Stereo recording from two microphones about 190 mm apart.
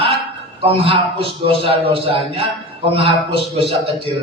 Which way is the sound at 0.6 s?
30° right (ahead or behind).